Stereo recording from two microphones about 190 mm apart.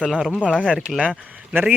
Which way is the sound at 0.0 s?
Centre (ahead or behind).